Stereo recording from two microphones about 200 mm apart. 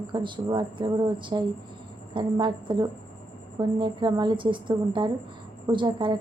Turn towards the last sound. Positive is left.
turn(degrees=-25)  # may be behind; listen again after turning